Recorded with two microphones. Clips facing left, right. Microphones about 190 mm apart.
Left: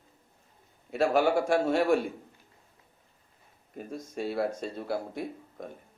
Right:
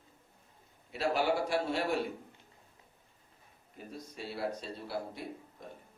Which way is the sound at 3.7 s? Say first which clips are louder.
Left 9 dB; 45° left (ahead or behind).